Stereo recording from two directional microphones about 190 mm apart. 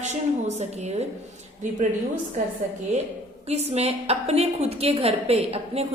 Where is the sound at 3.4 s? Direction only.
35° right (ahead or behind).